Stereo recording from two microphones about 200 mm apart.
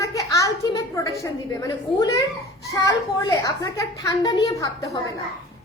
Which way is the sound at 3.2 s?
15° left (ahead or behind).